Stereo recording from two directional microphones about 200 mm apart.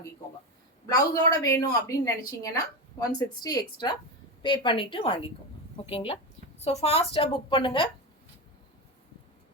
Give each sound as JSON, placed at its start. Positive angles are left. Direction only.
{"t": 0.9, "sound": "a woman's voice", "side_deg": 15}